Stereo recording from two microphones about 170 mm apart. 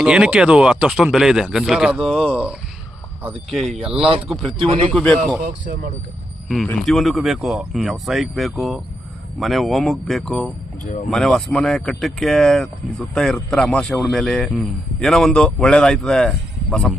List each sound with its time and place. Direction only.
0.0 s speech: 5° right (ahead or behind)
3.5 s speech: centre (ahead or behind)
4.5 s a man's voice: 30° right (ahead or behind)
4.9 s speech: 5° left (ahead or behind)
6.7 s speech: centre (ahead or behind)